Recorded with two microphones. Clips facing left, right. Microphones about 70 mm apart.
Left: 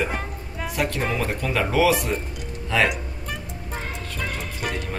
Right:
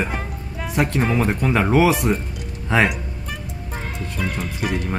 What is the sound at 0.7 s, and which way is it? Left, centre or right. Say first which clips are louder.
Speech: right 5 dB; right.